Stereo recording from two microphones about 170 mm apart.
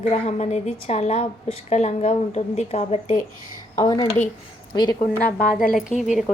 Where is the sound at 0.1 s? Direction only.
40° left (ahead or behind).